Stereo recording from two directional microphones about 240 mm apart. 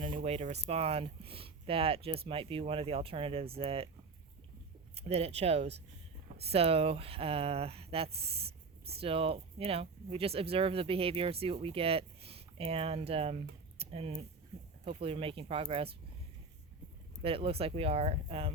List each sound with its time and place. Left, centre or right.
0.2 s speech: right
4.9 s speech: right
17.2 s speech: right